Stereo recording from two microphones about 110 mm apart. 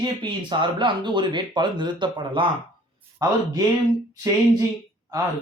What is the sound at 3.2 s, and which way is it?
Speech, 35° right (ahead or behind).